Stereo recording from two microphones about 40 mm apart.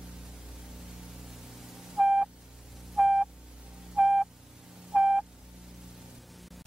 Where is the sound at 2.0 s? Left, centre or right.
Centre.